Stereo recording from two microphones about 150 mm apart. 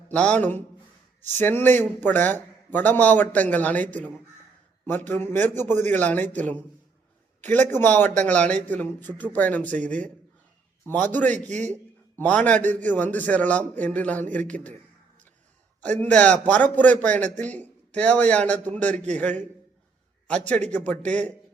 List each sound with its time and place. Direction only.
0.1 s a man's voice: 10° left (ahead or behind)
7.7 s a man's voice: 15° left (ahead or behind)
11.3 s a man's voice: 55° right (ahead or behind)
12.1 s a man's voice: 10° left (ahead or behind)
16.0 s a man's voice: 10° left (ahead or behind)
17.2 s a man's voice: 55° right (ahead or behind)
17.4 s a man's voice: 10° left (ahead or behind)
20.2 s a man's voice: 10° left (ahead or behind)